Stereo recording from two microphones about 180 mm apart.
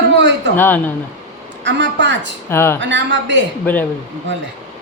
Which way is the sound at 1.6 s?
85° right.